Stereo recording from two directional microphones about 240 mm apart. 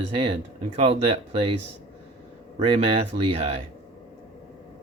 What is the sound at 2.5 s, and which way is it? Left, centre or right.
Speech, right.